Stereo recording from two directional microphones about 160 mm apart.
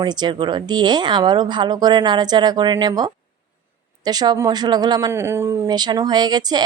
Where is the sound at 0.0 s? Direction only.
25° right (ahead or behind).